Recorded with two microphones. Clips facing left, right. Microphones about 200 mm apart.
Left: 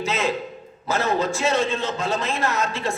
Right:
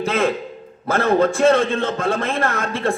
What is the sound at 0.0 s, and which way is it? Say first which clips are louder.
A man's voice: right 5 dB; 55° right (ahead or behind).